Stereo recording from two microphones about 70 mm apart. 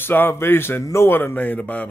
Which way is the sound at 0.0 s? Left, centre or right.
Left.